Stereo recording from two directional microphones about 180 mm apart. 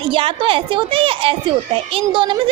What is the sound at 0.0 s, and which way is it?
A woman's voice, 30° right (ahead or behind).